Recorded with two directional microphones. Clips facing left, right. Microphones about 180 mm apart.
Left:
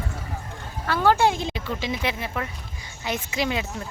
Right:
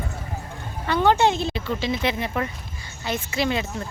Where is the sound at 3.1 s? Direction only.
10° left (ahead or behind).